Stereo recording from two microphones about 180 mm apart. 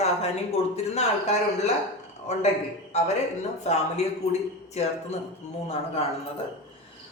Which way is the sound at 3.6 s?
40° left (ahead or behind).